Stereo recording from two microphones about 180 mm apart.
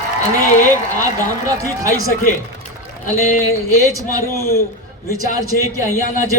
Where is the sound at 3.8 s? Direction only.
20° right (ahead or behind).